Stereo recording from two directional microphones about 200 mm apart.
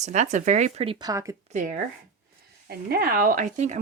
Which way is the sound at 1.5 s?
40° right (ahead or behind).